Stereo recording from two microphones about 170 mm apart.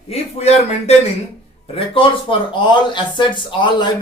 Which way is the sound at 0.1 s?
40° left (ahead or behind).